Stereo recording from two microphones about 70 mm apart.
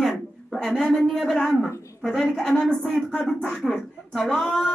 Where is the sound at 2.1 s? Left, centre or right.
Centre.